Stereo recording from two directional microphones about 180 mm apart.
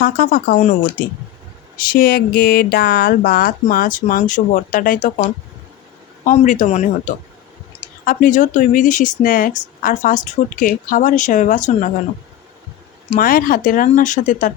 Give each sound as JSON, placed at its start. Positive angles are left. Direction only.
{"t": 0.0, "sound": "speech", "side_deg": 50}
{"t": 6.2, "sound": "speech", "side_deg": 45}
{"t": 13.1, "sound": "speech", "side_deg": 50}